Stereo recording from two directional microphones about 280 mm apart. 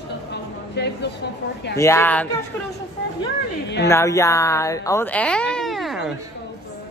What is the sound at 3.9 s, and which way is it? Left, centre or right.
Speech, centre.